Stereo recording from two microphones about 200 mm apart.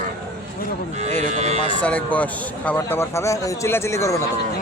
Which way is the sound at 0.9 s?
35° right (ahead or behind).